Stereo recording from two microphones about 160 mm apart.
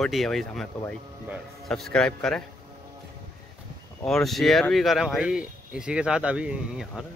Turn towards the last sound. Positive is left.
turn(degrees=-5)  # may be behind; listen again after turning